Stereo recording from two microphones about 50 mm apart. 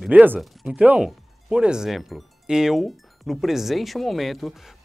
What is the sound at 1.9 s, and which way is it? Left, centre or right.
Speech, centre.